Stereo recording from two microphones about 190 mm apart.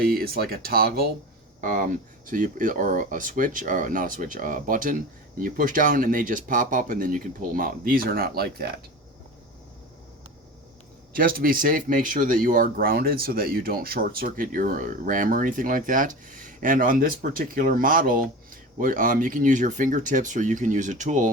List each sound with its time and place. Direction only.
0.0 s speech: 50° right (ahead or behind)
11.1 s speech: 50° right (ahead or behind)